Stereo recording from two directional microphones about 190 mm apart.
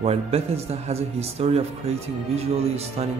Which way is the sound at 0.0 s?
35° right (ahead or behind).